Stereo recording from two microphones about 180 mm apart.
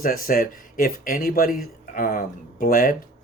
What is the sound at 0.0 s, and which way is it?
Speech, 50° left (ahead or behind).